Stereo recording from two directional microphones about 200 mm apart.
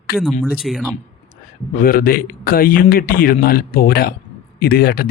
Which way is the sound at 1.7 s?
45° left (ahead or behind).